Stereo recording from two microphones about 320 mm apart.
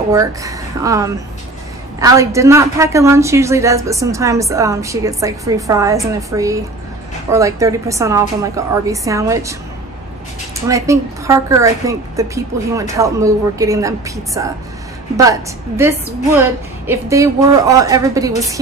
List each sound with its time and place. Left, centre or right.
0.1 s a woman's voice: centre
10.7 s a woman's voice: centre